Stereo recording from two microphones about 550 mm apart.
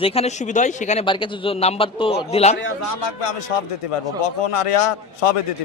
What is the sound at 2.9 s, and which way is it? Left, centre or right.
A man's voice, left.